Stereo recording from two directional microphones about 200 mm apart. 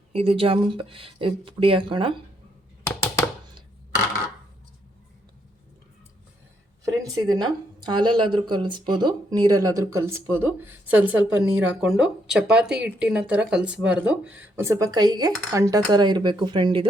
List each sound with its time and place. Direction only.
0.1 s speech: 30° right (ahead or behind)
7.0 s speech: 20° right (ahead or behind)